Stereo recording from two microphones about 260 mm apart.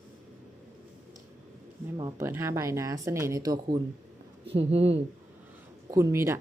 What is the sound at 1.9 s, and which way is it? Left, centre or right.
Speech, centre.